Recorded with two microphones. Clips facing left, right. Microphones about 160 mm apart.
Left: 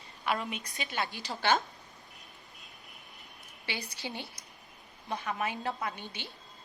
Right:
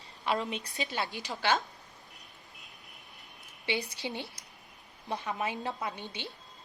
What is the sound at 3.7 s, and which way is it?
A woman's voice, 25° right (ahead or behind).